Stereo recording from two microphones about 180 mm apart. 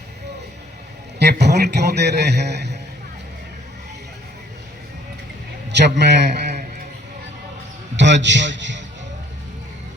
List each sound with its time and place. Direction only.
1.2 s a man's voice: 65° right (ahead or behind)
5.7 s a man's voice: 70° right (ahead or behind)
7.9 s a man's voice: 80° right